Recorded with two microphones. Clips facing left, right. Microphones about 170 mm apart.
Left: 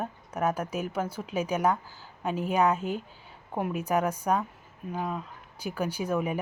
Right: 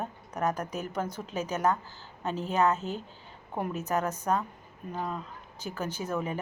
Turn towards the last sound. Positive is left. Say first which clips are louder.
# left 3 dB
turn(degrees=10)  # may be behind; listen again after turning